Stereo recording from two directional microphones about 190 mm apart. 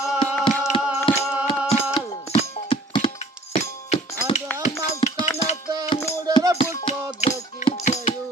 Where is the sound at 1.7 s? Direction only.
30° left (ahead or behind).